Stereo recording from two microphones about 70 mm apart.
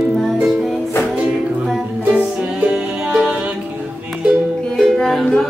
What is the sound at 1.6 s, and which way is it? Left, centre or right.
Music, centre.